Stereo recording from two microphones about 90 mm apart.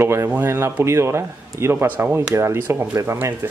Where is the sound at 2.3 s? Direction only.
30° right (ahead or behind).